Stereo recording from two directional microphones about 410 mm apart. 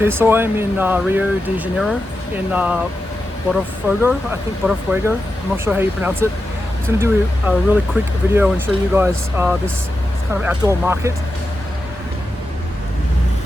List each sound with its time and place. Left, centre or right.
0.0 s speech: centre